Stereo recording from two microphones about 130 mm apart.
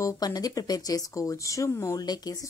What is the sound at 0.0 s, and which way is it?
Speech, 25° left (ahead or behind).